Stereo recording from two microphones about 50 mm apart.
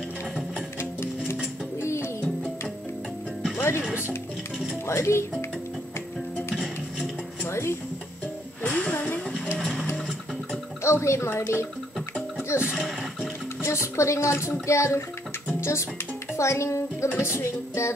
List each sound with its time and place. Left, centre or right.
1.8 s music: left
3.5 s music: left
4.8 s speech: left
6.5 s music: centre
7.4 s music: left
8.6 s music: left
10.8 s speech: left
12.7 s a sound: centre
13.6 s speech: left
17.2 s music: left